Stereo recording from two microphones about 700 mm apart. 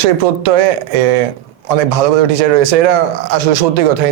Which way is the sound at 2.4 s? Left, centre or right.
Right.